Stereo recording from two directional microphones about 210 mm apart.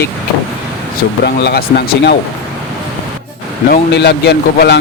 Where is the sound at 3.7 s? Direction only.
50° left (ahead or behind).